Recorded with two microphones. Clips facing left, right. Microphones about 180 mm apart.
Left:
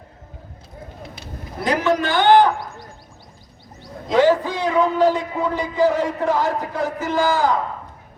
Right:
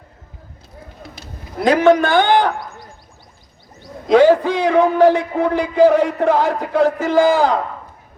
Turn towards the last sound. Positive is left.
turn(degrees=-65)  # may be behind; listen again after turning